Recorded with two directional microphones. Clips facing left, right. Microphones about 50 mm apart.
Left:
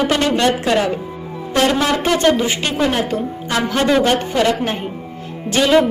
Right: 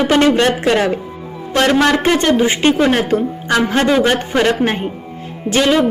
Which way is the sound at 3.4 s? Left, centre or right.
Right.